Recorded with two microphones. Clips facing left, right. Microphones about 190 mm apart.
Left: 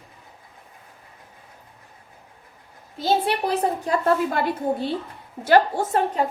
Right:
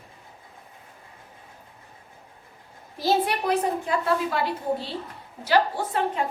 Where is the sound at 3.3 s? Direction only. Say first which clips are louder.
Left 2 dB; 35° left (ahead or behind).